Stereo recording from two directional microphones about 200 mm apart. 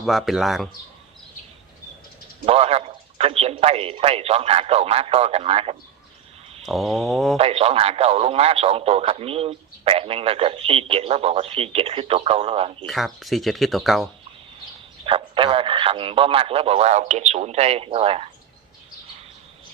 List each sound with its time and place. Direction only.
0.0 s speech: centre (ahead or behind)
2.5 s a man's voice: 30° right (ahead or behind)
6.7 s speech: centre (ahead or behind)
7.3 s speech: 30° right (ahead or behind)
12.8 s speech: centre (ahead or behind)
15.0 s speech: 25° right (ahead or behind)